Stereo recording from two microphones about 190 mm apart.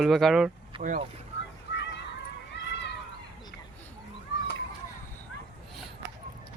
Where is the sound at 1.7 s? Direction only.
70° left (ahead or behind).